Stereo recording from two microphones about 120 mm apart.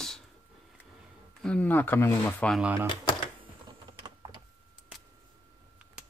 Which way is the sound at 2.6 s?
15° right (ahead or behind).